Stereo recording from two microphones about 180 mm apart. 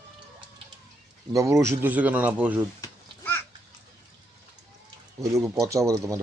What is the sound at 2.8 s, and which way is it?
Babbling, 10° left (ahead or behind).